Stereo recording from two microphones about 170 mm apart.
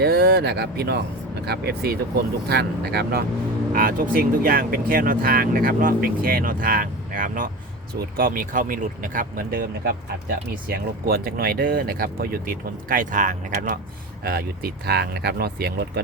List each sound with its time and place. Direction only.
0.0 s speech: 70° right (ahead or behind)
3.7 s speech: 60° right (ahead or behind)
14.3 s speech: 65° right (ahead or behind)